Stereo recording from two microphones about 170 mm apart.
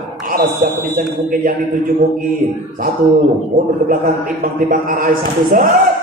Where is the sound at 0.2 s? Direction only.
55° right (ahead or behind).